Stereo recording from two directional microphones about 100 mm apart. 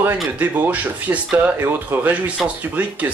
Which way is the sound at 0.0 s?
15° right (ahead or behind).